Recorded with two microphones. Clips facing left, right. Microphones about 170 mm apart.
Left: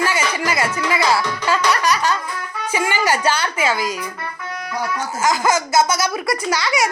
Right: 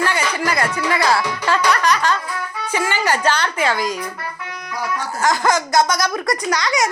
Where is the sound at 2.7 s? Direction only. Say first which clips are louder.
Left 1 dB; 10° left (ahead or behind).